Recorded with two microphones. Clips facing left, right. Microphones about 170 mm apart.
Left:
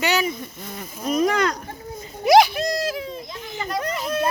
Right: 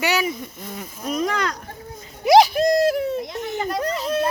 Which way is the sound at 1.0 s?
10° left (ahead or behind).